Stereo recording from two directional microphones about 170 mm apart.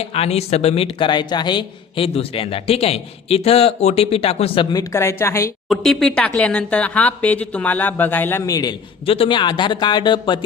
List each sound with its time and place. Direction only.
0.0 s speech: 35° left (ahead or behind); by 5.5 s 15° left (ahead or behind)
5.6 s speech: centre (ahead or behind); by 8.7 s 20° left (ahead or behind)
9.0 s speech: 35° left (ahead or behind)